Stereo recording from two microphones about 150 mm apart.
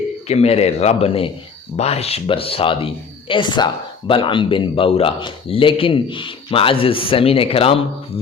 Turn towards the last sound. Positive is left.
turn(degrees=40)  # may be behind; listen again after turning